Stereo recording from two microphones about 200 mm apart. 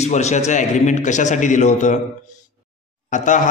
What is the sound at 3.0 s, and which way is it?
Speech, 40° left (ahead or behind).